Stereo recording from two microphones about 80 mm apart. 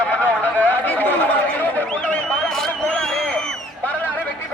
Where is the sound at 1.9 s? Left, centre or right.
Centre.